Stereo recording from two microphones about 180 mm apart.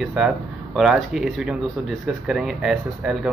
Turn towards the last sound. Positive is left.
turn(degrees=-5)  # may be behind; listen again after turning